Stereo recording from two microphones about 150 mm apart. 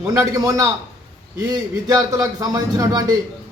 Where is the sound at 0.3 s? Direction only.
20° right (ahead or behind).